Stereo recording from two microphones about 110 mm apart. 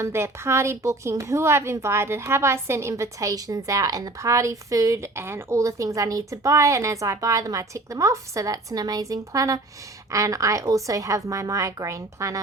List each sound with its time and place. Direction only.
0.0 s speech: 25° right (ahead or behind)